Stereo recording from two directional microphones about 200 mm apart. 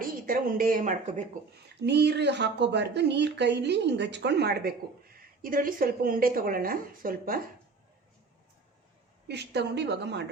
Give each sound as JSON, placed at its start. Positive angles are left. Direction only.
{"t": 0.0, "sound": "speech", "side_deg": -45}
{"t": 1.8, "sound": "speech", "side_deg": -60}
{"t": 9.2, "sound": "speech", "side_deg": -55}